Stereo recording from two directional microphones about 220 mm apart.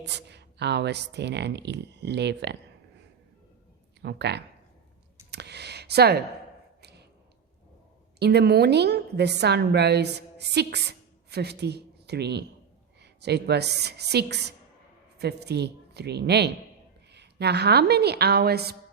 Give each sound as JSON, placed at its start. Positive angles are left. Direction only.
{"t": 0.0, "sound": "speech", "side_deg": -50}
{"t": 4.0, "sound": "speech", "side_deg": -50}
{"t": 5.3, "sound": "a sound", "side_deg": -50}
{"t": 8.2, "sound": "a woman's voice", "side_deg": -50}